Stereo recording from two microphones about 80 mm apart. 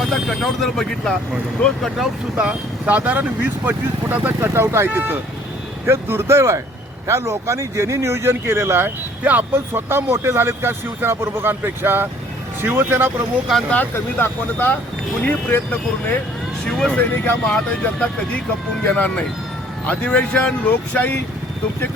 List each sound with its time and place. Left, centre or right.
0.1 s speech: centre
2.4 s speech: centre
13.9 s speech: left
16.6 s speech: centre
16.9 s speech: left